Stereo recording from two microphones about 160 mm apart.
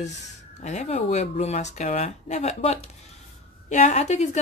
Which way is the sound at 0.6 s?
45° left (ahead or behind).